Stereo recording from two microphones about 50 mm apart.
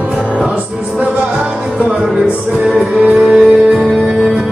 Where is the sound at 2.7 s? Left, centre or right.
Right.